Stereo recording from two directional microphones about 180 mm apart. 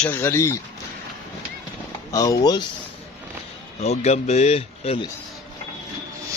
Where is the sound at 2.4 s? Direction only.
25° left (ahead or behind).